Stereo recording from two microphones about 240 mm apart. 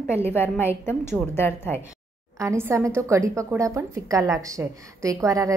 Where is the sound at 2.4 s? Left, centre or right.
Centre.